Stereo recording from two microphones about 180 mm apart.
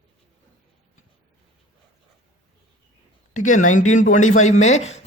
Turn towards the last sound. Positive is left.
turn(degrees=40)  # may be behind; listen again after turning